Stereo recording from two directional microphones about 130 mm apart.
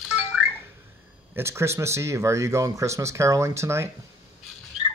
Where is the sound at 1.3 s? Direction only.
20° right (ahead or behind).